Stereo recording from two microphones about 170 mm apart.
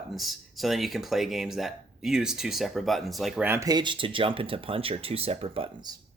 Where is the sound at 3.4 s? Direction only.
15° right (ahead or behind).